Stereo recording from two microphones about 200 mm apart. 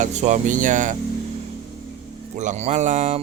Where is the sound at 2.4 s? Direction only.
35° right (ahead or behind).